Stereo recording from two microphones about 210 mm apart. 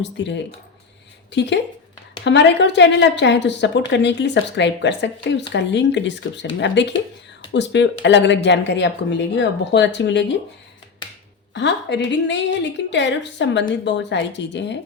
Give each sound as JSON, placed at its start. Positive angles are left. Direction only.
{"t": 0.0, "sound": "a woman's voice", "side_deg": 55}
{"t": 11.5, "sound": "a woman's voice", "side_deg": 55}